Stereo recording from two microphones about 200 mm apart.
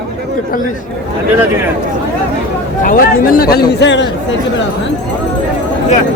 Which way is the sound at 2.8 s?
45° left (ahead or behind).